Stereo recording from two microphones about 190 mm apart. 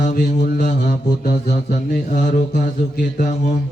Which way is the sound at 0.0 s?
50° left (ahead or behind).